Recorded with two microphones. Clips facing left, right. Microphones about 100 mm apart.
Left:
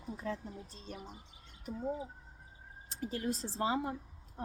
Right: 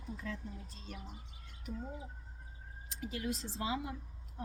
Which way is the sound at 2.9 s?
40° left (ahead or behind).